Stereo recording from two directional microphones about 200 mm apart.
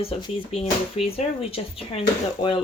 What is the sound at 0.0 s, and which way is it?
Speech, 30° left (ahead or behind).